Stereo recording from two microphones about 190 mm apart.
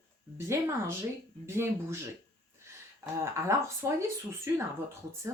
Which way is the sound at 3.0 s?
15° right (ahead or behind).